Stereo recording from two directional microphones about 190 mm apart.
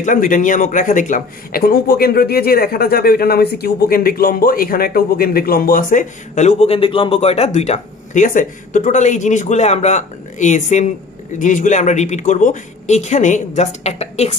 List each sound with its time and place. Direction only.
0.0 s speech: 45° left (ahead or behind)